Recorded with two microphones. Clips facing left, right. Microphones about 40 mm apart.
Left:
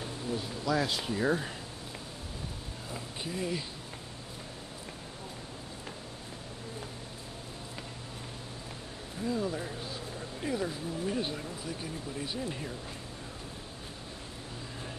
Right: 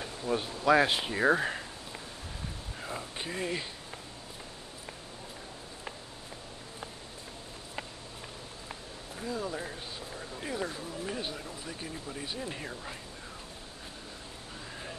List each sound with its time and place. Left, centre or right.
0.3 s speech: right
2.9 s speech: right
9.2 s speech: centre
11.1 s speech: centre